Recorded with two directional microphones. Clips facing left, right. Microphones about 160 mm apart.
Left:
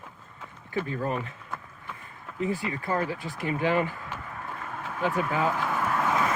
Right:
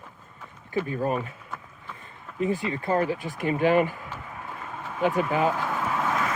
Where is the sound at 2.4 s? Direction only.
20° right (ahead or behind).